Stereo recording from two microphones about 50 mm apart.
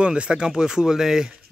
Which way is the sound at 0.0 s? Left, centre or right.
Right.